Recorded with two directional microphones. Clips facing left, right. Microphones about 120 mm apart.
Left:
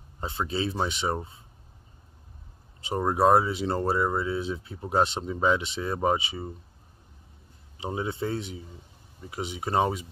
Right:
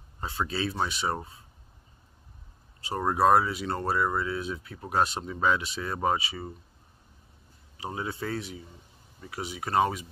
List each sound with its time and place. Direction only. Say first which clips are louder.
0.2 s speech: left 1 dB; 25° left (ahead or behind)
2.8 s speech: left 1 dB; 20° left (ahead or behind)
7.7 s speech: left 3 dB; 25° left (ahead or behind)